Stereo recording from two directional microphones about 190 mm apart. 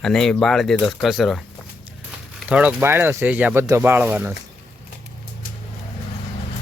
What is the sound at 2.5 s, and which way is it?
Speech, 5° right (ahead or behind).